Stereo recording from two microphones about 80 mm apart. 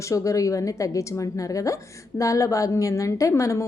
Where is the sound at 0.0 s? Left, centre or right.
Left.